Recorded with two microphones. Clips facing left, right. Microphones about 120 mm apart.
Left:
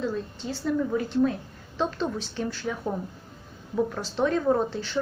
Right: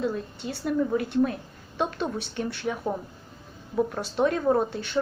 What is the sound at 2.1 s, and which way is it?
Speech, 65° right (ahead or behind).